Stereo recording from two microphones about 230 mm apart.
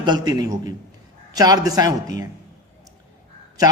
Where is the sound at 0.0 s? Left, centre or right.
Centre.